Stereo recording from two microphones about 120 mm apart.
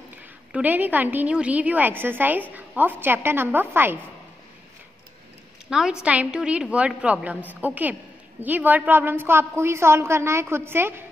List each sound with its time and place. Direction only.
0.5 s a woman's voice: 10° right (ahead or behind)
5.7 s a woman's voice: 5° right (ahead or behind)